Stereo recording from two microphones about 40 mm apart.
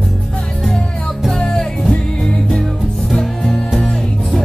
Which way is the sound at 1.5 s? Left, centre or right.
Centre.